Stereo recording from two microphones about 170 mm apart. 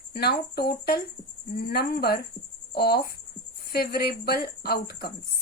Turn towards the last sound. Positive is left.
turn(degrees=65)  # may be behind; listen again after turning